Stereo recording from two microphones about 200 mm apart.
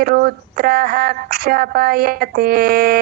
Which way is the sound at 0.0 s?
50° right (ahead or behind).